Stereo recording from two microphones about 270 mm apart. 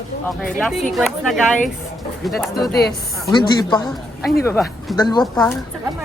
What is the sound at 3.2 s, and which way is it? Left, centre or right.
Speech, centre.